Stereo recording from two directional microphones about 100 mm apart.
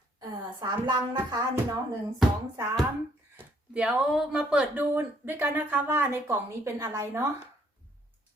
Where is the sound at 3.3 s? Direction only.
15° right (ahead or behind); by 7.2 s 30° right (ahead or behind).